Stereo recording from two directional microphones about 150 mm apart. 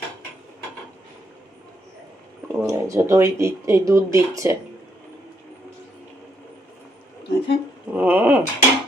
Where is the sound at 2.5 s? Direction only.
20° right (ahead or behind).